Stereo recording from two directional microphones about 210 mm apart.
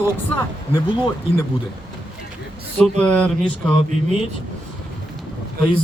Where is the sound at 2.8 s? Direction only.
5° left (ahead or behind).